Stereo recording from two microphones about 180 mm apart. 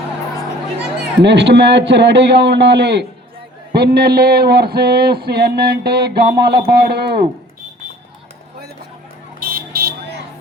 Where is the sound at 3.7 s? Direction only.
60° right (ahead or behind).